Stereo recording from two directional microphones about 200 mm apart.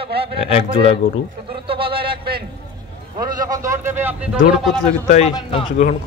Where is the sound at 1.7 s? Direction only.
25° right (ahead or behind).